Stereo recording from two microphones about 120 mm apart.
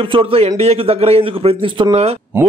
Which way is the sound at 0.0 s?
50° right (ahead or behind).